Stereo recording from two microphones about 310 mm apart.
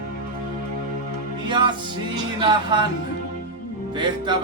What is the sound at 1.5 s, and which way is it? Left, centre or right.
Music, centre.